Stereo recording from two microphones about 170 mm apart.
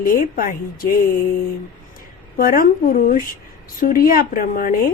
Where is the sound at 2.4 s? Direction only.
55° left (ahead or behind).